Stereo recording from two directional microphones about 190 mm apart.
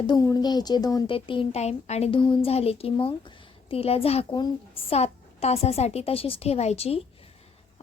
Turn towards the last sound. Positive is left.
turn(degrees=30)  # may be behind; listen again after turning